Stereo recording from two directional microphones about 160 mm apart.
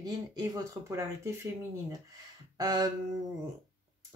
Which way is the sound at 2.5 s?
25° right (ahead or behind).